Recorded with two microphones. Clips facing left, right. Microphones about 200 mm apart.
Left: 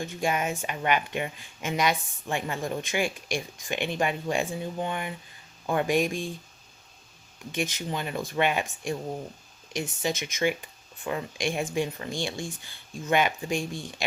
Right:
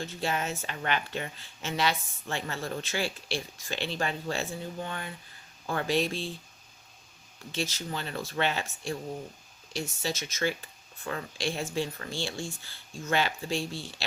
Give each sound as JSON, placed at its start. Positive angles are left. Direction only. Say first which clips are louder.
{"t": 0.0, "sound": "a woman's voice", "louder": "left 4 dB", "side_deg": 15}
{"t": 7.5, "sound": "a woman's voice", "louder": "left 3 dB", "side_deg": 15}
{"t": 10.0, "sound": "a woman's voice", "louder": "left 4 dB", "side_deg": 15}